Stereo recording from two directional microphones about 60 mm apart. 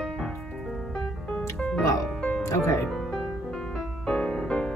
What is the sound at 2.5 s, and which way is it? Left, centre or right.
Music, left.